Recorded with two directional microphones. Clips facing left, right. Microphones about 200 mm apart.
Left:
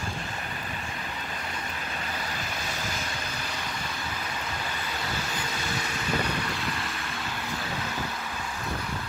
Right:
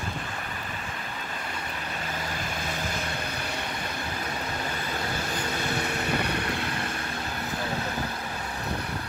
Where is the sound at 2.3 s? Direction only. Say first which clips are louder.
Right 2 dB; 55° right (ahead or behind).